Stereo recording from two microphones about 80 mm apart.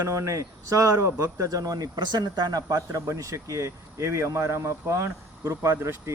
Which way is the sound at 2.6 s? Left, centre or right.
Right.